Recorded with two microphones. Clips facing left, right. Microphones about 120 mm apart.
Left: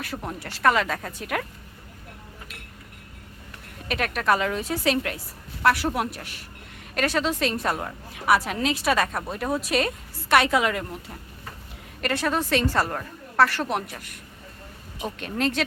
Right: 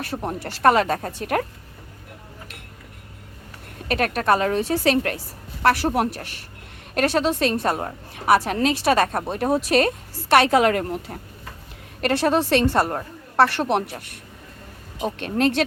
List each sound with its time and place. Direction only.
0.0 s a woman's voice: 30° right (ahead or behind)
3.8 s a woman's voice: 40° right (ahead or behind)
7.0 s a woman's voice: 25° right (ahead or behind)
9.7 s a woman's voice: 55° right (ahead or behind)
10.4 s speech: 45° right (ahead or behind)
12.1 s a woman's voice: 30° right (ahead or behind)
15.2 s a woman's voice: 60° right (ahead or behind)